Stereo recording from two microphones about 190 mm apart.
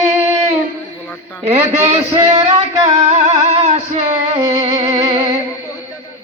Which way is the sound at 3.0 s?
35° right (ahead or behind).